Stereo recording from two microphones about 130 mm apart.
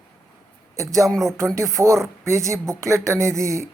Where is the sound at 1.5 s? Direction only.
25° right (ahead or behind).